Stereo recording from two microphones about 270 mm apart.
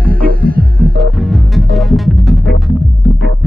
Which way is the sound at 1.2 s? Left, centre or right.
Centre.